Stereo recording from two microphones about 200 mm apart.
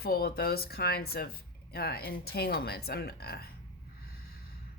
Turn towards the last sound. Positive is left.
turn(degrees=50)  # may be behind; listen again after turning